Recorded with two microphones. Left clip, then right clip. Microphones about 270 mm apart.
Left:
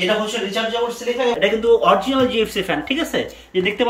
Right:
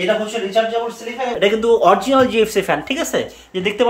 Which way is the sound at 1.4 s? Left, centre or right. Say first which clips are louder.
Right 3 dB; centre.